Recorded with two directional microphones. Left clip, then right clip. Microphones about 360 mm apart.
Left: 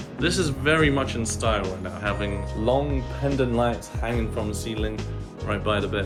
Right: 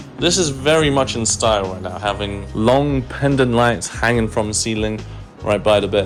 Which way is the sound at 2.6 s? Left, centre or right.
Right.